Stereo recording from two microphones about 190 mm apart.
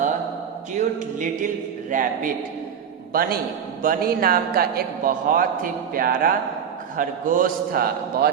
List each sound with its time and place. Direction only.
0.8 s a man's voice: 45° right (ahead or behind)